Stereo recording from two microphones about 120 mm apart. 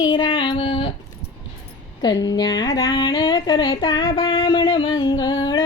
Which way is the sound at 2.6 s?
30° left (ahead or behind).